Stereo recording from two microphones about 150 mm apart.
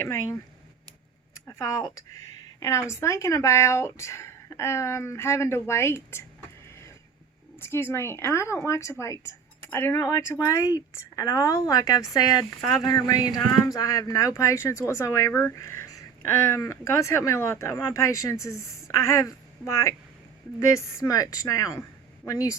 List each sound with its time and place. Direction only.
0.0 s a woman's voice: 20° left (ahead or behind)
1.5 s a woman's voice: 20° left (ahead or behind)
7.6 s a woman's voice: 15° left (ahead or behind)